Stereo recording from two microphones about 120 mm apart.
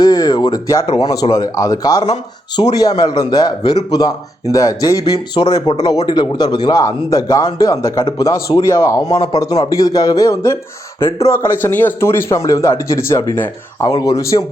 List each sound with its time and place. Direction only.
0.0 s a man's voice: 30° left (ahead or behind)
13.9 s speech: 30° left (ahead or behind)